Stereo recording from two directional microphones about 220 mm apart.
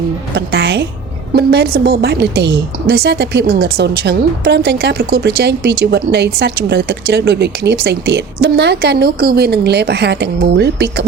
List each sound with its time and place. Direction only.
0.3 s a woman's voice: 50° right (ahead or behind)